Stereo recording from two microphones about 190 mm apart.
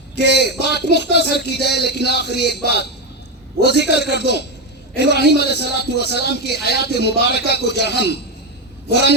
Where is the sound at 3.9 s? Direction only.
60° left (ahead or behind).